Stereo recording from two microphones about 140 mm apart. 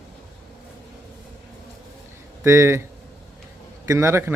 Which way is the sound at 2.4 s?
20° right (ahead or behind).